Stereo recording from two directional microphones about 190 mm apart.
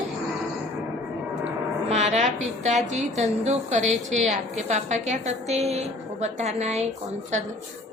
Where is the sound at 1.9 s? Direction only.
35° right (ahead or behind).